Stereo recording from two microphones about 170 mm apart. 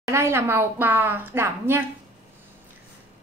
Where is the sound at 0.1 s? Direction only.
15° right (ahead or behind).